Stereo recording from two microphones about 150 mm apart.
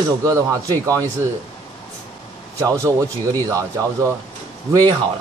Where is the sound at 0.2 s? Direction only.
20° right (ahead or behind).